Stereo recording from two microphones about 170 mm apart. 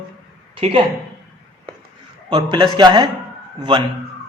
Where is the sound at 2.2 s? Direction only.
25° right (ahead or behind).